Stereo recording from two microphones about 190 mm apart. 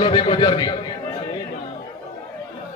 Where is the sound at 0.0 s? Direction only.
25° left (ahead or behind).